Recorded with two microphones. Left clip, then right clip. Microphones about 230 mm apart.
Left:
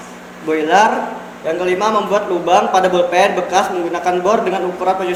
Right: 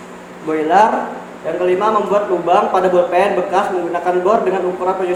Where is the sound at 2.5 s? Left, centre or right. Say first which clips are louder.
Left 1 dB; left.